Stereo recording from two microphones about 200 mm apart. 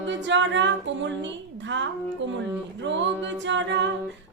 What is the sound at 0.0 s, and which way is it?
Music, 65° right (ahead or behind).